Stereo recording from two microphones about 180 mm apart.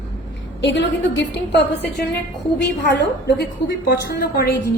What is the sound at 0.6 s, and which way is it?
A woman's voice, 80° left.